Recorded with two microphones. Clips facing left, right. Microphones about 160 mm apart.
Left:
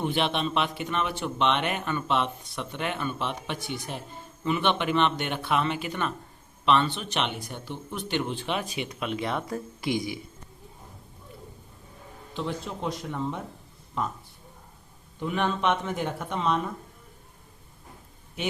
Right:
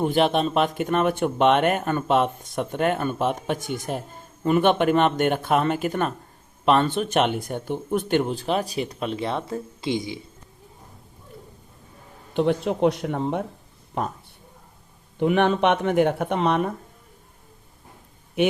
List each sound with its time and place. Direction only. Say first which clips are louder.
0.0 s speech: right 7 dB; 40° right (ahead or behind); by 10.2 s 25° right (ahead or behind)
12.3 s speech: right 11 dB; 60° right (ahead or behind)
15.2 s speech: right 8 dB; 65° right (ahead or behind)
18.4 s speech: right 10 dB; 60° right (ahead or behind)